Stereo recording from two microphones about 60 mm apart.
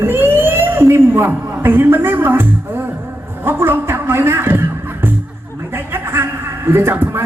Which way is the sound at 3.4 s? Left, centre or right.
Right.